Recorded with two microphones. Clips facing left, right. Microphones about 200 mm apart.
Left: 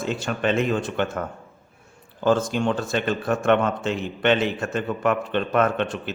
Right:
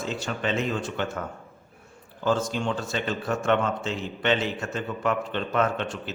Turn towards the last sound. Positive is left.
turn(degrees=60)  # may be behind; listen again after turning